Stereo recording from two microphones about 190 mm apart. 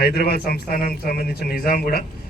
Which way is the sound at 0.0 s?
55° left (ahead or behind).